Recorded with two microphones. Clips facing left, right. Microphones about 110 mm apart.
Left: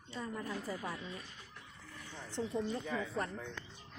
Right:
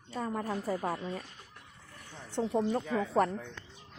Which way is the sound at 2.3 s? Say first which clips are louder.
Right 7 dB; 65° right (ahead or behind).